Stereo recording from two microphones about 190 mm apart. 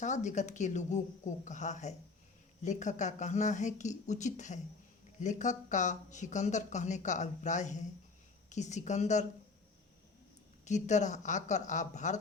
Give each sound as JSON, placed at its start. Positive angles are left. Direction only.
{"t": 0.0, "sound": "speech", "side_deg": 40}
{"t": 10.7, "sound": "speech", "side_deg": 40}